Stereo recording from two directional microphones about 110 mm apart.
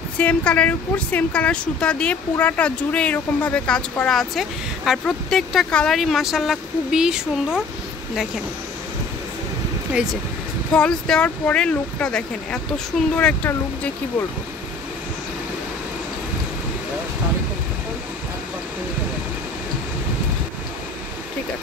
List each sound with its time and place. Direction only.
0.2 s speech: 10° left (ahead or behind); by 7.6 s 5° right (ahead or behind)
10.7 s speech: 10° left (ahead or behind)